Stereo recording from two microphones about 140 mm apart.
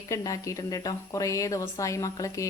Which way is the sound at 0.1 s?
25° left (ahead or behind).